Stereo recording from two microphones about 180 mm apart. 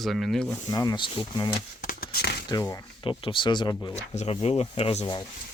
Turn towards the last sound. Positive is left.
turn(degrees=35)  # may be behind; listen again after turning